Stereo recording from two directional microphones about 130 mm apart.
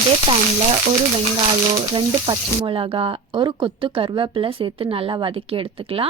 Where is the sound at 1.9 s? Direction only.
45° right (ahead or behind).